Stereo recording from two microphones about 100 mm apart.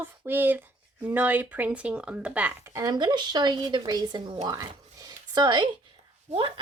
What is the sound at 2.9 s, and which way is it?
Speech, 50° right (ahead or behind).